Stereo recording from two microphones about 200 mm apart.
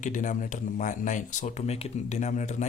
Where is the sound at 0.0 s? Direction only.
40° left (ahead or behind).